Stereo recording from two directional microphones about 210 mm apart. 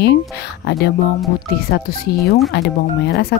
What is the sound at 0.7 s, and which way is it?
Speech, 50° left (ahead or behind).